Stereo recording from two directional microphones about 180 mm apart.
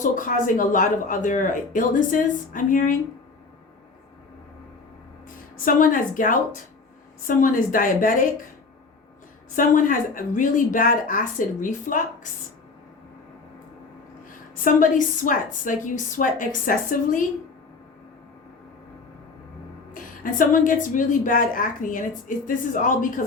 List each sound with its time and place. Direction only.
0.0 s a woman's voice: 45° left (ahead or behind)
5.6 s a woman's voice: 50° left (ahead or behind)
9.6 s a woman's voice: 50° left (ahead or behind)
14.3 s a woman's voice: 50° left (ahead or behind)
19.9 s a woman's voice: 50° left (ahead or behind)